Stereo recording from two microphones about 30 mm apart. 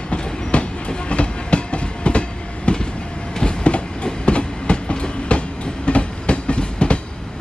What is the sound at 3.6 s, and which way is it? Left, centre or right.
Train, left.